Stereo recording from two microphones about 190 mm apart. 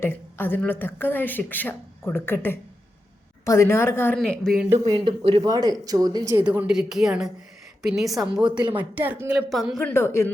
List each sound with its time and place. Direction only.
0.0 s speech: 10° left (ahead or behind)
4.2 s a woman's voice: centre (ahead or behind)
4.9 s speech: 25° right (ahead or behind)
6.4 s a woman's voice: 5° right (ahead or behind)
8.4 s speech: 25° right (ahead or behind)
8.7 s a woman's voice: 10° right (ahead or behind); by 10.3 s 15° left (ahead or behind)